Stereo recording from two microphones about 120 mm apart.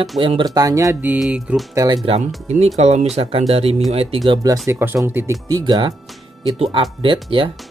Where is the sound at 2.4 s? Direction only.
65° right (ahead or behind).